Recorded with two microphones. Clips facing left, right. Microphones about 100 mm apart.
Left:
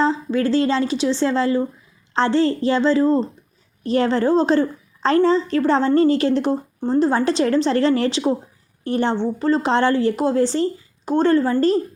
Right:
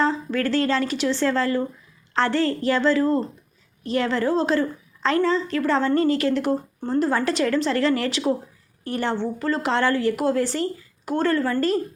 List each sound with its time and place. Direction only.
0.0 s speech: 20° left (ahead or behind)
3.8 s a woman's voice: 35° left (ahead or behind)